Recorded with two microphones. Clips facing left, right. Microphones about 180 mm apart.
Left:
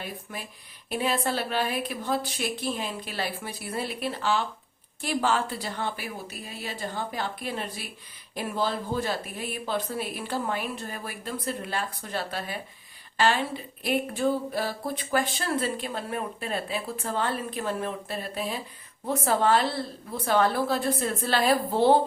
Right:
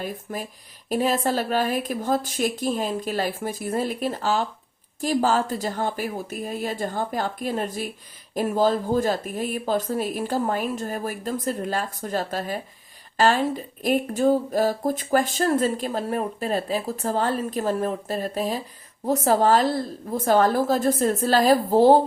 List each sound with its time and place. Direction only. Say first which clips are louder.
0.0 s speech: right 7 dB; 45° right (ahead or behind)